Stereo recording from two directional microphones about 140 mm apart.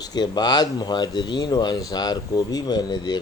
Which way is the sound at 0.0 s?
30° left (ahead or behind).